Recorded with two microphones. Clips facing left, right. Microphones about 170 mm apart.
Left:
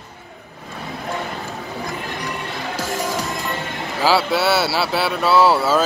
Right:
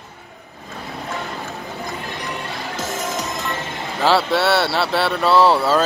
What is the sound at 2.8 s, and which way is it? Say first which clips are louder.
Music: left 2 dB; 30° left (ahead or behind).